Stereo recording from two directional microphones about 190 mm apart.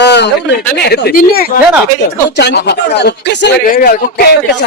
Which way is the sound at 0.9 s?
55° left (ahead or behind).